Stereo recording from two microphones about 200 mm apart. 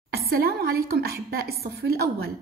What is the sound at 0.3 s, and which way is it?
A woman's voice, 50° right (ahead or behind).